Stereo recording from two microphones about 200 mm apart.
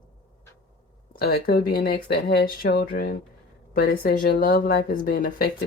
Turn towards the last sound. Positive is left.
turn(degrees=45)  # may be behind; listen again after turning